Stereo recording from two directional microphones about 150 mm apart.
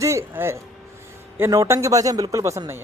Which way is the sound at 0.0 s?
20° right (ahead or behind).